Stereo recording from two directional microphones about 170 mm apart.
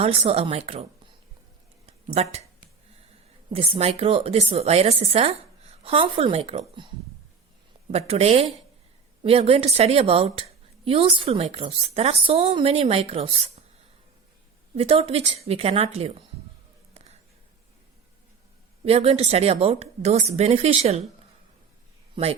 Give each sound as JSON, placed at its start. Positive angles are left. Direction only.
{"t": 0.0, "sound": "a woman's voice", "side_deg": -35}
{"t": 3.5, "sound": "a woman's voice", "side_deg": -35}
{"t": 14.8, "sound": "a woman's voice", "side_deg": -35}
{"t": 16.9, "sound": "a sound", "side_deg": -40}
{"t": 18.9, "sound": "a woman's voice", "side_deg": -35}
{"t": 22.1, "sound": "speech", "side_deg": -35}